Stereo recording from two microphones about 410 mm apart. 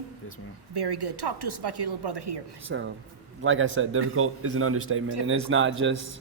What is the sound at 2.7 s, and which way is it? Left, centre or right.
Speech, right.